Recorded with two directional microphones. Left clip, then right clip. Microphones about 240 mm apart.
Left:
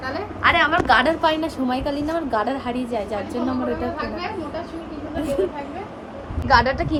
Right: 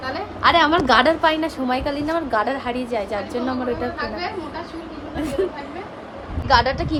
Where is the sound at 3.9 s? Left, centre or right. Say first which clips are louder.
Right 1 dB; centre.